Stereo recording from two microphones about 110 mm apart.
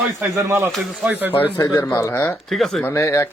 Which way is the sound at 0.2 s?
25° right (ahead or behind).